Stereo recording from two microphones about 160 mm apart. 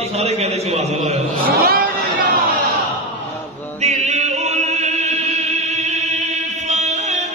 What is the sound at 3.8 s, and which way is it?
Music, 45° right (ahead or behind).